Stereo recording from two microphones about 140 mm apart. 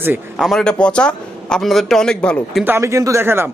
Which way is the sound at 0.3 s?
Centre (ahead or behind).